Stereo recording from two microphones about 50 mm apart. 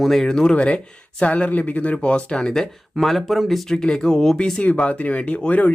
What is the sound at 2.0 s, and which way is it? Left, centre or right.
Speech, centre.